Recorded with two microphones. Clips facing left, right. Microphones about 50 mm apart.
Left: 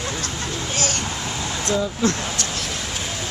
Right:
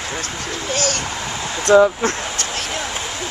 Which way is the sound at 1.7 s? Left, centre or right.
Right.